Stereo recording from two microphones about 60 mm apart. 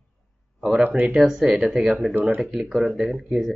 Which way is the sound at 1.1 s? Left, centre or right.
Centre.